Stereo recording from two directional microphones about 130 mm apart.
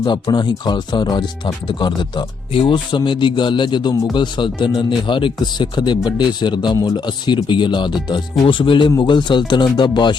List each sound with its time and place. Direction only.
0.0 s speech: 35° left (ahead or behind)